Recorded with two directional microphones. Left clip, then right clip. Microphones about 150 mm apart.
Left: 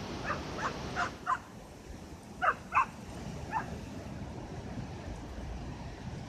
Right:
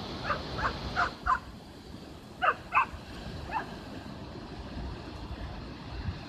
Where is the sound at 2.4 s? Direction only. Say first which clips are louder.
Right 2 dB; 55° right (ahead or behind).